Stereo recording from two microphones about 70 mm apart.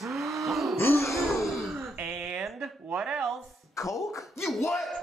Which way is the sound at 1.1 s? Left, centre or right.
Centre.